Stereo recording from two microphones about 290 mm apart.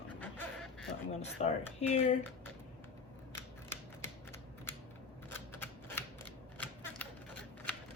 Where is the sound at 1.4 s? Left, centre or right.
Left.